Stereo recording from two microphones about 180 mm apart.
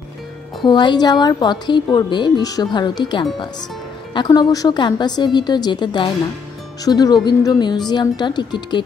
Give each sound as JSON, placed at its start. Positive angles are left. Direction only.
{"t": 0.7, "sound": "a woman's voice", "side_deg": 25}